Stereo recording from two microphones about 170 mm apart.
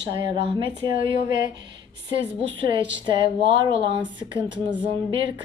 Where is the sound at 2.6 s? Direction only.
30° right (ahead or behind).